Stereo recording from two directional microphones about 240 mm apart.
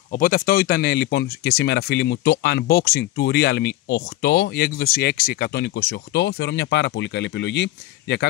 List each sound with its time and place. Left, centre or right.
0.1 s speech: left